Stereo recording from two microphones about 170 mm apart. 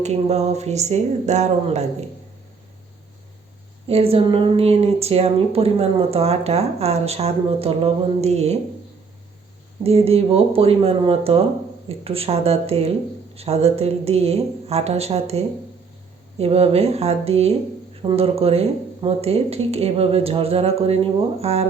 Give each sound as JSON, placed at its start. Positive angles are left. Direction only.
{"t": 0.0, "sound": "a woman's voice", "side_deg": -40}
{"t": 3.8, "sound": "a woman's voice", "side_deg": -35}
{"t": 9.8, "sound": "a woman's voice", "side_deg": -35}